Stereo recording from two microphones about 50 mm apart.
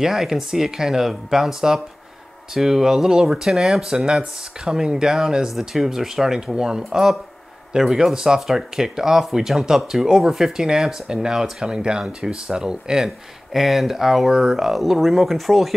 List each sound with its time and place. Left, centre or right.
0.0 s speech: centre
13.5 s speech: centre